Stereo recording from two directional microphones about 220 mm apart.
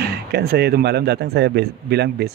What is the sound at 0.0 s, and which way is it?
Speech, 45° right (ahead or behind).